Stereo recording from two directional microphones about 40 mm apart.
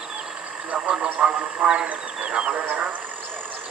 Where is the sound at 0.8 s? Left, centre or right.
Right.